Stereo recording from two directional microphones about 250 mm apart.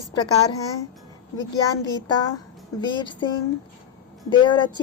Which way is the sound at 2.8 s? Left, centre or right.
Centre.